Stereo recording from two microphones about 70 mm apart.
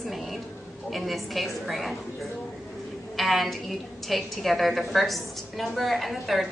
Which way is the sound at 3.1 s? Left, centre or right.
Centre.